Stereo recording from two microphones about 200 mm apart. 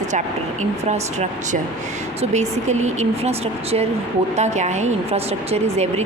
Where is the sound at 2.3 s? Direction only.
35° right (ahead or behind).